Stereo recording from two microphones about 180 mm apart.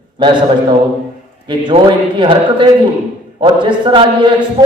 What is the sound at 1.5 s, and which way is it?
A man's voice, 25° right (ahead or behind).